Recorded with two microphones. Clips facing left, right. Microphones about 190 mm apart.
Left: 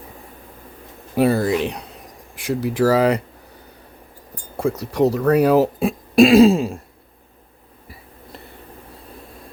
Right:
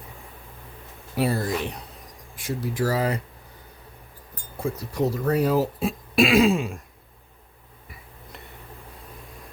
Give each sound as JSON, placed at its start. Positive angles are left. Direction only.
{"t": 1.1, "sound": "speech", "side_deg": 55}
{"t": 1.4, "sound": "a sound", "side_deg": 90}
{"t": 2.3, "sound": "speech", "side_deg": 75}
{"t": 4.5, "sound": "speech", "side_deg": 75}
{"t": 6.1, "sound": "throat clearing", "side_deg": 40}